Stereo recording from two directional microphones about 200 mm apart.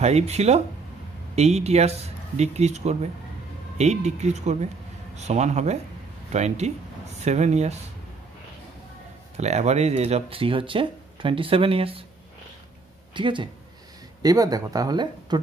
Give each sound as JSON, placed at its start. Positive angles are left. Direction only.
{"t": 0.0, "sound": "speech", "side_deg": -35}
{"t": 9.4, "sound": "speech", "side_deg": -35}
{"t": 13.1, "sound": "speech", "side_deg": -25}